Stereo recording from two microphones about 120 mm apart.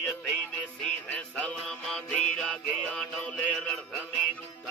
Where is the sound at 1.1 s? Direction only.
10° left (ahead or behind).